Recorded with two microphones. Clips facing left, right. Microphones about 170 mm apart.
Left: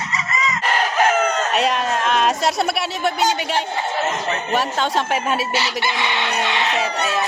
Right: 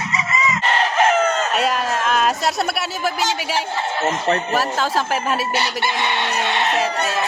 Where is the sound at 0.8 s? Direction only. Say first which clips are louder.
Right 1 dB; centre (ahead or behind).